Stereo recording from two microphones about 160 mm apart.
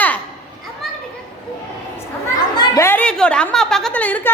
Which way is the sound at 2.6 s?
25° left (ahead or behind).